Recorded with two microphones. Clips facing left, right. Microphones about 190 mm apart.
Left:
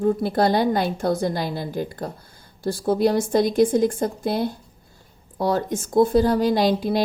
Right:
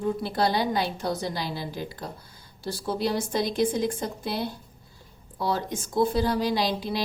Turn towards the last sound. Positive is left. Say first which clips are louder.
# left 7 dB
turn(degrees=50)  # may be behind; listen again after turning